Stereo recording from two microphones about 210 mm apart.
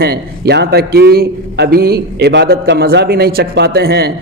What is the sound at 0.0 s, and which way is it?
A man's voice, 50° right (ahead or behind).